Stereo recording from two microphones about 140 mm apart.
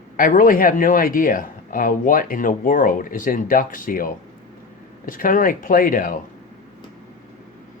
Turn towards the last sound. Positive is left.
turn(degrees=80)